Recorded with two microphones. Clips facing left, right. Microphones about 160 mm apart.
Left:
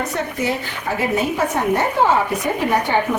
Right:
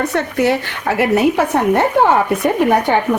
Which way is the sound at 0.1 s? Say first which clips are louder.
Right 6 dB; 70° right (ahead or behind).